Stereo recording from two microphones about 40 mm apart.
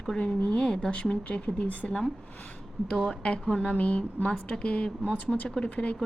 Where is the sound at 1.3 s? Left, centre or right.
Left.